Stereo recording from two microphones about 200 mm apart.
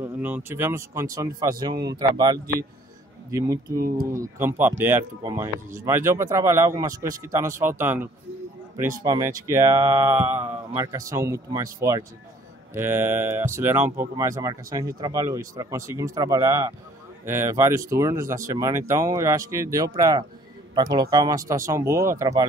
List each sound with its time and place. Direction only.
0.0 s speech: 10° right (ahead or behind)